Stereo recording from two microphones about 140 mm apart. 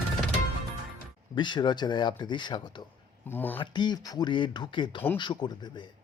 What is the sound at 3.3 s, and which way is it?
Speech, 15° left (ahead or behind).